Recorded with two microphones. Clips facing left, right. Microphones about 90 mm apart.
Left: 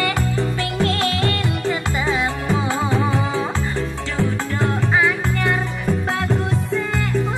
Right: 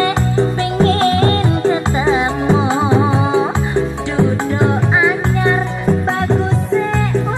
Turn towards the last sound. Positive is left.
turn(degrees=-20)  # may be behind; listen again after turning